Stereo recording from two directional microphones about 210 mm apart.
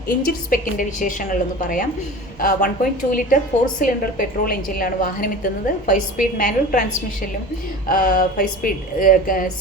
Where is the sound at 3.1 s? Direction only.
40° left (ahead or behind).